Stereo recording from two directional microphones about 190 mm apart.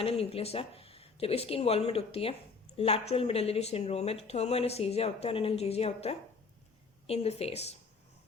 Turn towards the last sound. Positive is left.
turn(degrees=35)  # may be behind; listen again after turning